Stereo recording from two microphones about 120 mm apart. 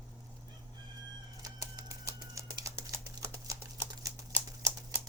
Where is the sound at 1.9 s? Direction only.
30° right (ahead or behind).